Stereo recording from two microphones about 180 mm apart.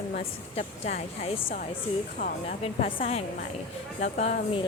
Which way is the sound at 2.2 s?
50° left (ahead or behind).